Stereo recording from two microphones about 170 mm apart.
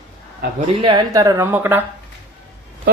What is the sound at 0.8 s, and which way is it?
Speech, 30° right (ahead or behind).